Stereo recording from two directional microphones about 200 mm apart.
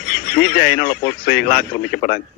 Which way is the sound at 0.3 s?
45° left (ahead or behind).